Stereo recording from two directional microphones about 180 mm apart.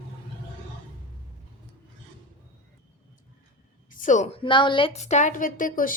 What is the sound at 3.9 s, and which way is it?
A woman's voice, 45° left (ahead or behind).